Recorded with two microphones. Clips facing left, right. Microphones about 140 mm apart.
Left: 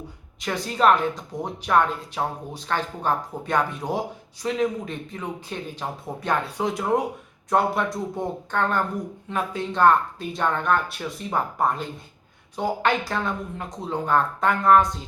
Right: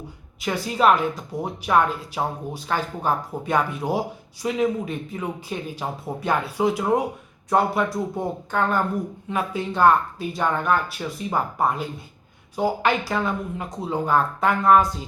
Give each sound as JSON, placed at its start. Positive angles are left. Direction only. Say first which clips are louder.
{"t": 0.4, "sound": "a woman's voice", "louder": "right 1 dB", "side_deg": -5}